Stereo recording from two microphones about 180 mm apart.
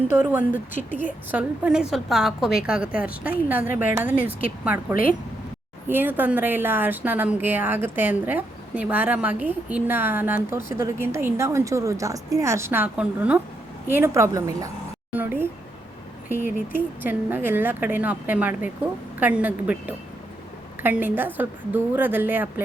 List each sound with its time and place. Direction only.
0.2 s a woman's voice: 10° right (ahead or behind)
0.7 s speech: 45° left (ahead or behind)
0.9 s a woman's voice: 10° right (ahead or behind)